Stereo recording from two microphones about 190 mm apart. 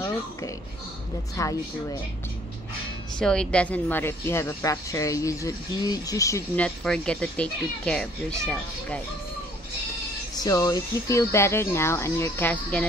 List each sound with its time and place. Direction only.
1.3 s a woman's voice: 15° left (ahead or behind)
3.2 s a woman's voice: 5° left (ahead or behind)
10.3 s a woman's voice: 20° left (ahead or behind)